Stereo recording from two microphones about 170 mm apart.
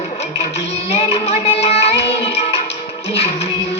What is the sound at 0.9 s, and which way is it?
Music, 35° left (ahead or behind).